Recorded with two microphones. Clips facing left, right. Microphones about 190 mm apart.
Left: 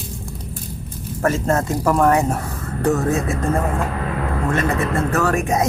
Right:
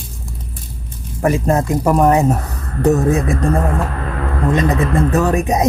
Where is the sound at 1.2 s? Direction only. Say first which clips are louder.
Right 3 dB; 15° right (ahead or behind).